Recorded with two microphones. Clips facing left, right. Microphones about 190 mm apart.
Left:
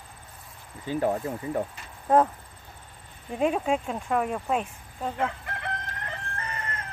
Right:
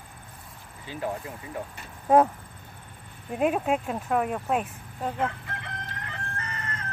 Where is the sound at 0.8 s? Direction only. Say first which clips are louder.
Left 6 dB; 40° left (ahead or behind).